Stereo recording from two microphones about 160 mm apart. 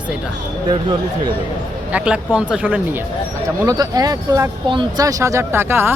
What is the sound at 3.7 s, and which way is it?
Speech, 25° right (ahead or behind).